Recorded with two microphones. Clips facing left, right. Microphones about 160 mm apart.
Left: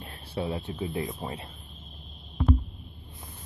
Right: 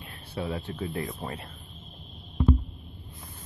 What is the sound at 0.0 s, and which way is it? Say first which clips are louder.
Speech: left 2 dB; 25° left (ahead or behind).